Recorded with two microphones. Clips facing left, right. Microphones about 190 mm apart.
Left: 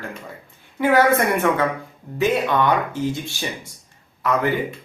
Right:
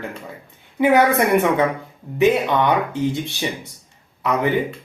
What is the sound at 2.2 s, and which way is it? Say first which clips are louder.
Speech: right 3 dB; 20° right (ahead or behind).